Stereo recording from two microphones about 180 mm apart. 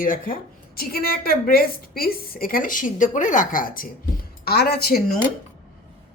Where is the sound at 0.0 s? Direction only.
50° left (ahead or behind).